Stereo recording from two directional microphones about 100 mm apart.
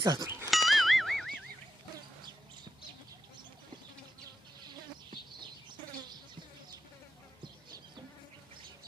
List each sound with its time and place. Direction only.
0.0 s speech: 45° right (ahead or behind)
0.3 s music: 25° right (ahead or behind)
0.7 s music: centre (ahead or behind)